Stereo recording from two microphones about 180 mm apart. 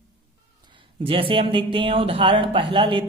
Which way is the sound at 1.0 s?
30° right (ahead or behind).